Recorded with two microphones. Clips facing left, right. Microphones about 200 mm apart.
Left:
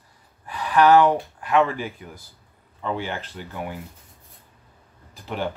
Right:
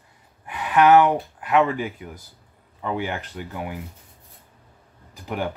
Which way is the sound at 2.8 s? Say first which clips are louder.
Right 1 dB; 15° right (ahead or behind).